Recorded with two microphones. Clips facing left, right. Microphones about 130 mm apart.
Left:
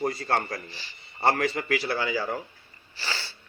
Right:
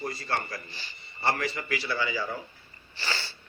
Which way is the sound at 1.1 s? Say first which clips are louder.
Left 5 dB; 85° left.